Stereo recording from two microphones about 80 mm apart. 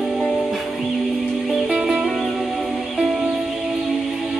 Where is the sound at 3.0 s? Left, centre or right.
Centre.